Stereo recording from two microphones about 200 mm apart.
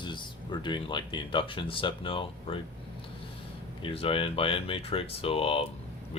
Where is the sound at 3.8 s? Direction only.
25° left (ahead or behind).